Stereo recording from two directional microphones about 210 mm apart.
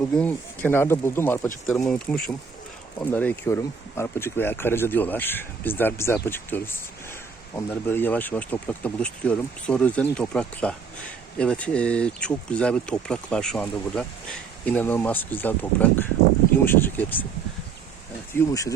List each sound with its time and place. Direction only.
0.1 s speech: 5° left (ahead or behind)
18.3 s speech: 15° left (ahead or behind)